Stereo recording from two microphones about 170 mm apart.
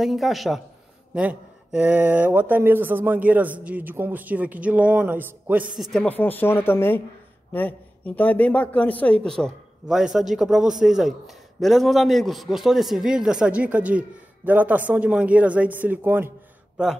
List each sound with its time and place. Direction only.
0.0 s a man's voice: centre (ahead or behind)
5.9 s a man's voice: 5° left (ahead or behind); by 16.3 s 10° right (ahead or behind)